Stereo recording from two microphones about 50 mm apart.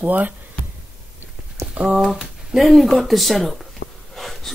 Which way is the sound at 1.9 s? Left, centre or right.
Centre.